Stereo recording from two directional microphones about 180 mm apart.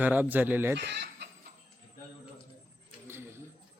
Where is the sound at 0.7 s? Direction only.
70° right (ahead or behind).